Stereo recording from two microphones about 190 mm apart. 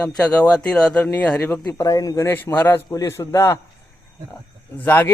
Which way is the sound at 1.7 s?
20° left (ahead or behind).